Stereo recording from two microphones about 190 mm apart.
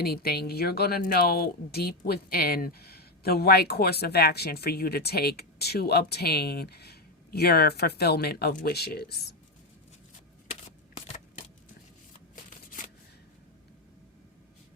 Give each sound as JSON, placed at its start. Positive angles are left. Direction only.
{"t": 0.0, "sound": "speech", "side_deg": 55}